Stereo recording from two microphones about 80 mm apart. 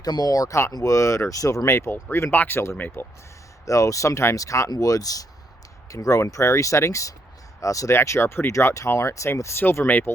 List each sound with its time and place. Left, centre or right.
0.0 s speech: left
3.7 s speech: left